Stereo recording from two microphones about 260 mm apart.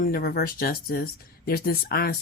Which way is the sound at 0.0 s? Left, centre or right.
Left.